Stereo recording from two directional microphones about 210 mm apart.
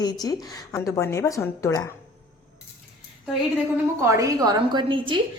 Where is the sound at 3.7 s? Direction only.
10° right (ahead or behind).